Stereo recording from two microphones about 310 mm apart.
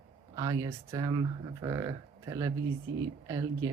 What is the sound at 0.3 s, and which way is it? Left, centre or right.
Speech, centre.